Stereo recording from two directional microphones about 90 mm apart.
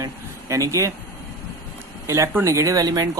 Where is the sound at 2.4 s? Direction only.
35° right (ahead or behind).